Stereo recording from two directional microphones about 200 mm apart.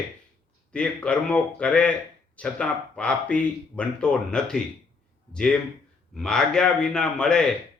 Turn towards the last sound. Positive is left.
turn(degrees=5)  # may be behind; listen again after turning